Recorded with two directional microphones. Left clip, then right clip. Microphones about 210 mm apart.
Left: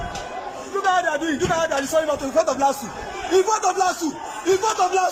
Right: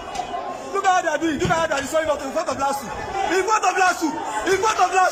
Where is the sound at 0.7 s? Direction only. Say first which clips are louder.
Right 1 dB; centre (ahead or behind).